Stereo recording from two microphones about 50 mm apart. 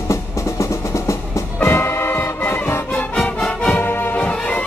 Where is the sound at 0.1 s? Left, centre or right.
Left.